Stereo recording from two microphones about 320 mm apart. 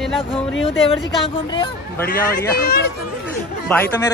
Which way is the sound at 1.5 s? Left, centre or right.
Centre.